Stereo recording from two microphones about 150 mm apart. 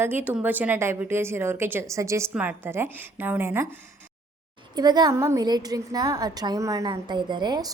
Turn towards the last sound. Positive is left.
turn(degrees=-30)  # may be behind; listen again after turning